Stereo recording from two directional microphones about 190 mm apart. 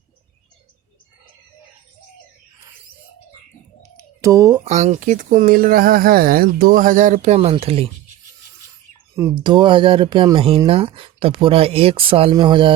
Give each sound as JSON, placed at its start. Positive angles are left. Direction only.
{"t": 3.9, "sound": "typing", "side_deg": -15}
{"t": 4.6, "sound": "speech", "side_deg": -35}
{"t": 9.3, "sound": "speech", "side_deg": -25}